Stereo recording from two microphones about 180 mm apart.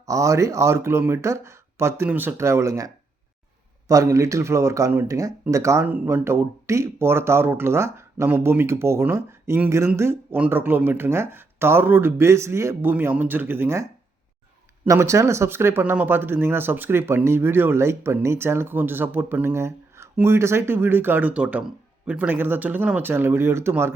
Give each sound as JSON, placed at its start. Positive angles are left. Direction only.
{"t": 0.0, "sound": "speech", "side_deg": -15}
{"t": 14.8, "sound": "speech", "side_deg": -15}